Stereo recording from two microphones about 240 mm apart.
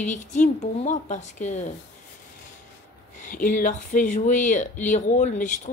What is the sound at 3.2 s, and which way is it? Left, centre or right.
Speech, left.